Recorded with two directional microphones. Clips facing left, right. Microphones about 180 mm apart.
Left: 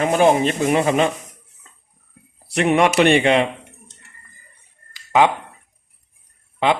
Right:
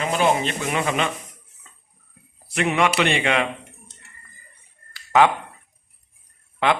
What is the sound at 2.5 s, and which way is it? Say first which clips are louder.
Speech: left 5 dB; 35° left (ahead or behind).